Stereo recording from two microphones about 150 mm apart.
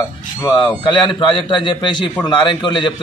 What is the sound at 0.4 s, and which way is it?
A man's voice, 30° left (ahead or behind).